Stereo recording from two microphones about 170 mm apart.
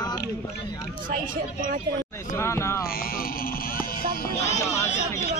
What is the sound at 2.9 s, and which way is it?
Speech, 60° left (ahead or behind).